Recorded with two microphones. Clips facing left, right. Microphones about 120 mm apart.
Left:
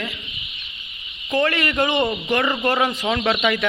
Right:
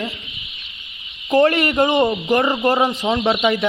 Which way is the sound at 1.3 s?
30° right (ahead or behind).